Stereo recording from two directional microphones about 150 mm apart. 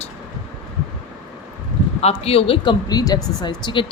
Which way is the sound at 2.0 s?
45° left (ahead or behind).